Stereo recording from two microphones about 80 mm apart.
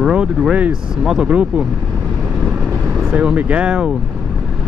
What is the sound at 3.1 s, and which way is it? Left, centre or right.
Speech, centre.